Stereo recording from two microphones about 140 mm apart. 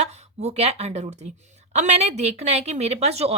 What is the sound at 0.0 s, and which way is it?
A woman's voice, 50° right (ahead or behind).